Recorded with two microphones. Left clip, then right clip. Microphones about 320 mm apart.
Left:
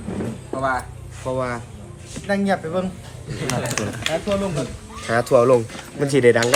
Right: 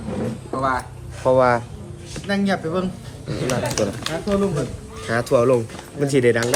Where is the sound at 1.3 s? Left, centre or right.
Right.